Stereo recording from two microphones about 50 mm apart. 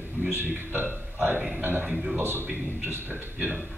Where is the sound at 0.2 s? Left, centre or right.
Right.